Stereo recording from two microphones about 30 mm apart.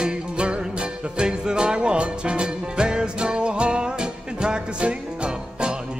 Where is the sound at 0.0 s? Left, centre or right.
Right.